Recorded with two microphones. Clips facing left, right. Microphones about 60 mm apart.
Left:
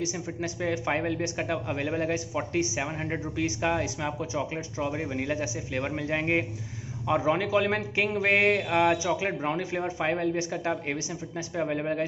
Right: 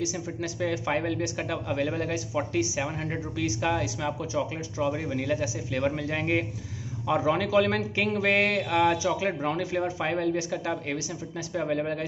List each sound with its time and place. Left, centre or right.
0.0 s a man's voice: left
11.5 s speech: centre